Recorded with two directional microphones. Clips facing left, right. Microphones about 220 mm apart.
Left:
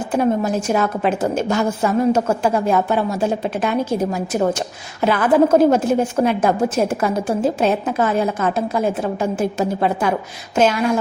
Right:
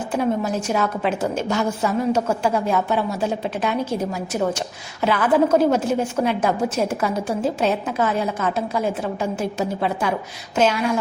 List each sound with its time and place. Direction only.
0.2 s a woman's voice: 50° left (ahead or behind)